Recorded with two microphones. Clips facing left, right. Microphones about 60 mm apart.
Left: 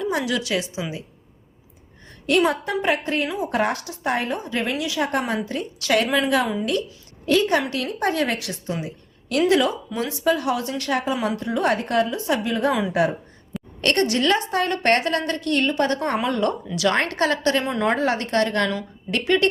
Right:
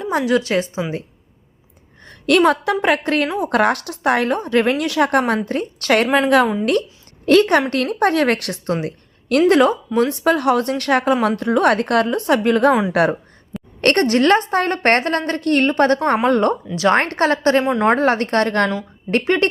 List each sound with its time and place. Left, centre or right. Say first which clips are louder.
0.0 s a woman's voice: right 6 dB; right
2.0 s a woman's voice: right 5 dB; right
7.3 s a woman's voice: right 6 dB; right
9.5 s a woman's voice: right 6 dB; right
13.8 s a woman's voice: right 6 dB; right